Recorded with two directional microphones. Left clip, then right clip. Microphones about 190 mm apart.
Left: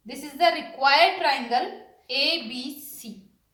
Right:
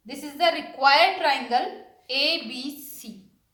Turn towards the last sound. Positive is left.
turn(degrees=-30)  # may be behind; listen again after turning